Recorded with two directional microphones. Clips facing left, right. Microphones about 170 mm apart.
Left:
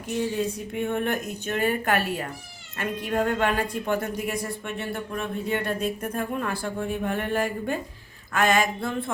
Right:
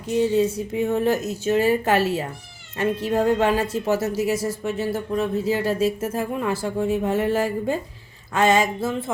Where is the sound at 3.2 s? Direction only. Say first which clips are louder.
Right 4 dB; 25° right (ahead or behind).